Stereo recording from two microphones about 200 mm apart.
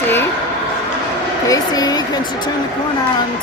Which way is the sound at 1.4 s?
20° left (ahead or behind).